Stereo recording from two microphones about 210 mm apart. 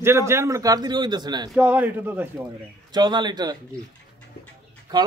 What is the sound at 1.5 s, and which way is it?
Speech, 5° right (ahead or behind).